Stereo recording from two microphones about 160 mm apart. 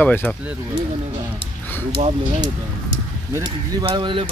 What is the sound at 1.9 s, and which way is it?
Speech, 35° right (ahead or behind).